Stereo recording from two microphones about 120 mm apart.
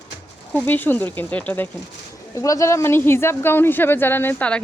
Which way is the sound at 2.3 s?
25° left (ahead or behind).